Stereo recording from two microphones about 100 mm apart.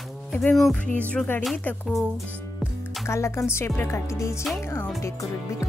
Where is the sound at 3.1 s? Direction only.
30° left (ahead or behind).